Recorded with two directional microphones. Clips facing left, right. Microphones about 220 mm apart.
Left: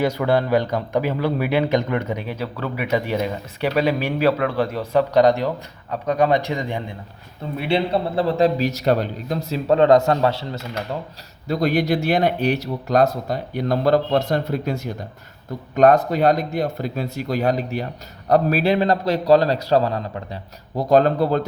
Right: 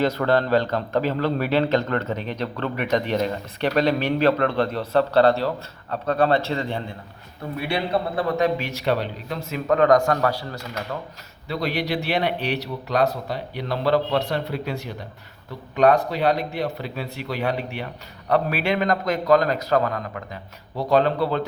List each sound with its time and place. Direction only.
0.0 s a man's voice: 10° left (ahead or behind)
7.6 s a man's voice: 25° left (ahead or behind)
11.4 s a man's voice: 45° left (ahead or behind)
20.7 s speech: 45° left (ahead or behind)